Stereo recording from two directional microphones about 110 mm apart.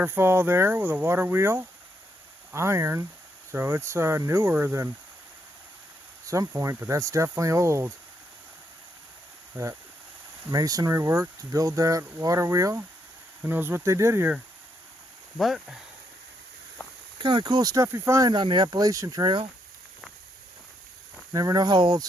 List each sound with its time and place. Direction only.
0.0 s speech: 20° right (ahead or behind)
6.2 s speech: 30° right (ahead or behind)
9.5 s speech: 20° right (ahead or behind)
10.5 s speech: 35° right (ahead or behind)
15.4 s speech: centre (ahead or behind)
17.2 s speech: 45° right (ahead or behind)
17.8 s speech: 25° right (ahead or behind)
18.3 s speech: 40° right (ahead or behind)
21.3 s speech: 35° right (ahead or behind)